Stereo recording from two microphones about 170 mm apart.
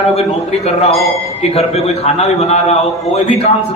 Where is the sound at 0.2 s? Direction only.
35° left (ahead or behind).